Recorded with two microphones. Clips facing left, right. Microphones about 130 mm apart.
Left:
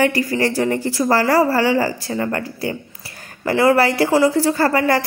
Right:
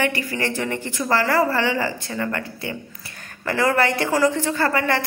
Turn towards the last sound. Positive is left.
turn(degrees=40)  # may be behind; listen again after turning